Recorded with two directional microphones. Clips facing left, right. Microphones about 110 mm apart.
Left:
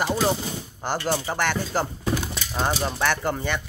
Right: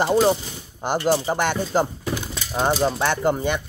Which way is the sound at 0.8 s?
15° right (ahead or behind).